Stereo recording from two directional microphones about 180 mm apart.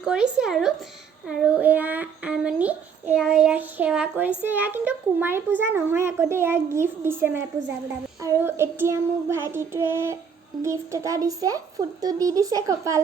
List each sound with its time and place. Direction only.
0.0 s a child's voice: 5° right (ahead or behind)